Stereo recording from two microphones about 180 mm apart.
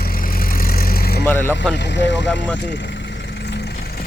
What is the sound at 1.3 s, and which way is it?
Speech, 15° left (ahead or behind).